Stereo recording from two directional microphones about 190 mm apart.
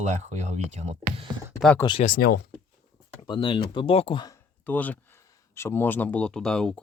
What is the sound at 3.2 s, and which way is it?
Speech, 25° left (ahead or behind).